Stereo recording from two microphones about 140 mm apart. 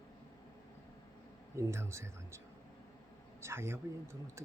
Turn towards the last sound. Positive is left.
turn(degrees=-20)  # may be behind; listen again after turning